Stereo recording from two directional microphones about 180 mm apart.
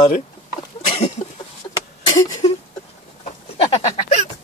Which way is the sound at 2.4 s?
35° left (ahead or behind).